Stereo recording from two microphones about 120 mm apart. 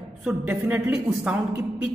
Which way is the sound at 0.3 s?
10° right (ahead or behind).